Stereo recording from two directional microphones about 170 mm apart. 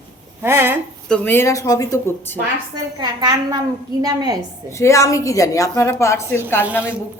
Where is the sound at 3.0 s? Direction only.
25° right (ahead or behind).